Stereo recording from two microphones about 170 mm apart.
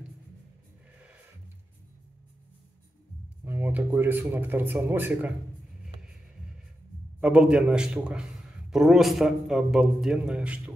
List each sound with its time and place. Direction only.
3.4 s speech: 10° right (ahead or behind)
7.2 s a man's voice: 5° right (ahead or behind)